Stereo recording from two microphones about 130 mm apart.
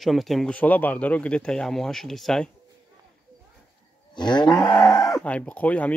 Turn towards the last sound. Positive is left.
turn(degrees=10)  # may be behind; listen again after turning